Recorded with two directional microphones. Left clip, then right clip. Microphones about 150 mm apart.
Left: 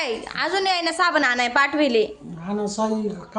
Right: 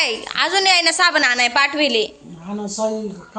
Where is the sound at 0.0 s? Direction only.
Centre (ahead or behind).